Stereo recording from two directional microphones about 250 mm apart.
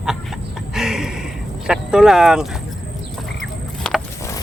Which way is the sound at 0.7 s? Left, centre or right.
Centre.